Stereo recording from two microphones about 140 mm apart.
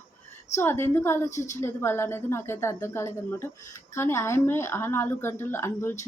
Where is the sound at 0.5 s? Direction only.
20° left (ahead or behind).